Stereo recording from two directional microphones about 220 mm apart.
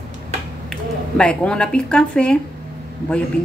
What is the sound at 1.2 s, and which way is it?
Speech, 5° left (ahead or behind).